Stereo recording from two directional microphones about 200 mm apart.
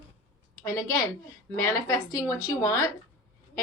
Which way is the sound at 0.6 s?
15° left (ahead or behind).